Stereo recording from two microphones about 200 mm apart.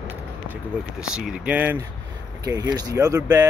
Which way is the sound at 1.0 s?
5° right (ahead or behind).